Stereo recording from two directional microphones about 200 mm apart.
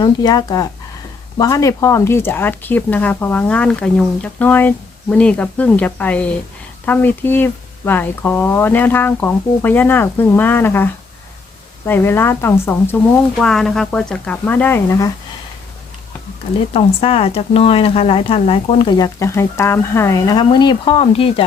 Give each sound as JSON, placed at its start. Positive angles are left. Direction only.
{"t": 0.0, "sound": "speech", "side_deg": 20}
{"t": 13.4, "sound": "speech", "side_deg": 0}
{"t": 16.7, "sound": "speech", "side_deg": 30}